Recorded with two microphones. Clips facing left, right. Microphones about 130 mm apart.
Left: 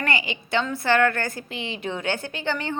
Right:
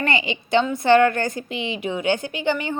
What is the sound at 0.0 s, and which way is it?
A woman's voice, 25° right (ahead or behind).